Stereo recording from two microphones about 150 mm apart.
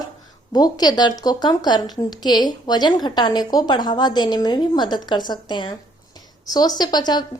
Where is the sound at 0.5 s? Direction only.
25° left (ahead or behind).